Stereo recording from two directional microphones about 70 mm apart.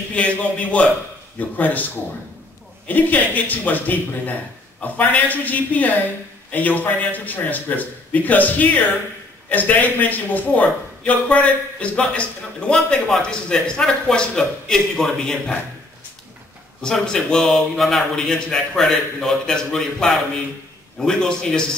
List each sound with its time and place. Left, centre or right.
0.1 s speech: centre
2.9 s a man's voice: left; by 15.6 s centre
16.8 s a man's voice: centre